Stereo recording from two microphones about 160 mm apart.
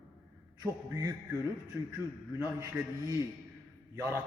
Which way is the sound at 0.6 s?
20° right (ahead or behind).